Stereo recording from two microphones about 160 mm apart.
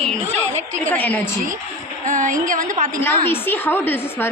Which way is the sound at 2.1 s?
55° right (ahead or behind).